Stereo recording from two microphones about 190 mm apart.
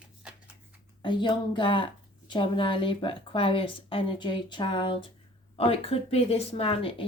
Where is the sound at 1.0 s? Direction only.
25° left (ahead or behind).